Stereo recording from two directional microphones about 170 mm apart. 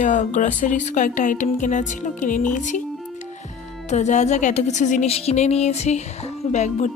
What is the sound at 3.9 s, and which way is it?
Speech, 45° left (ahead or behind).